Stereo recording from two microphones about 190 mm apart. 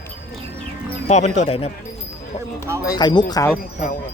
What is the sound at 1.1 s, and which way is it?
Speech, 35° left (ahead or behind).